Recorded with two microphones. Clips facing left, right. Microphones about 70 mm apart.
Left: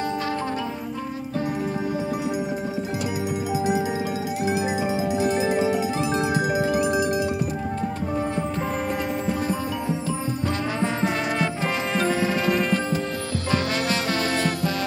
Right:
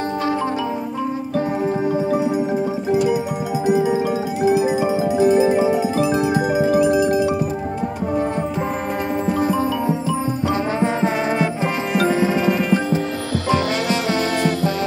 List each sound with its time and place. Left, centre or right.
2.0 s music: right
4.5 s music: right
10.8 s music: centre
12.4 s music: centre